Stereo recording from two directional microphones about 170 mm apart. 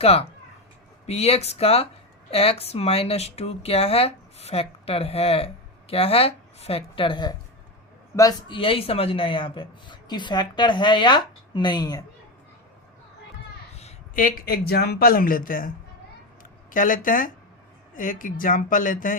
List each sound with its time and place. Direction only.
0.0 s speech: 35° left (ahead or behind)
14.2 s speech: 55° left (ahead or behind)
16.7 s speech: 50° left (ahead or behind)